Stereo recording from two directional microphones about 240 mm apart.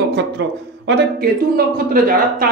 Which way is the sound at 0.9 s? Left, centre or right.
Right.